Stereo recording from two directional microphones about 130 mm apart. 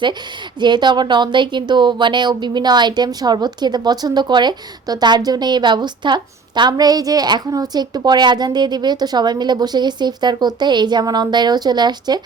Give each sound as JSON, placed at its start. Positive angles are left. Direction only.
{"t": 0.6, "sound": "speech", "side_deg": -35}